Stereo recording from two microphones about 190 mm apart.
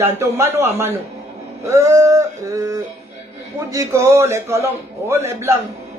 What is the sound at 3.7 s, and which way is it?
Speech, 15° right (ahead or behind).